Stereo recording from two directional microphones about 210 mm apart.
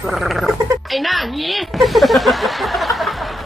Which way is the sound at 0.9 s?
Centre (ahead or behind).